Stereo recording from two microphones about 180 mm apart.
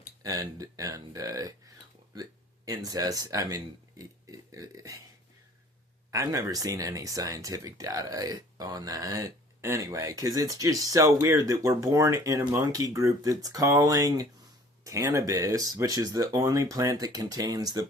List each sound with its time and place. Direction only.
0.2 s speech: 20° right (ahead or behind)
6.1 s speech: 20° right (ahead or behind)